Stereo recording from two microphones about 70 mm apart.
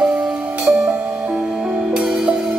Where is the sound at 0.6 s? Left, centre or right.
Centre.